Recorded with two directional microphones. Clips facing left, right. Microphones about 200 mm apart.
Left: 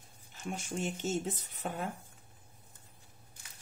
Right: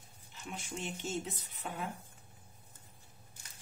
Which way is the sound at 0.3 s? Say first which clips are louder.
Left 5 dB; 45° left (ahead or behind).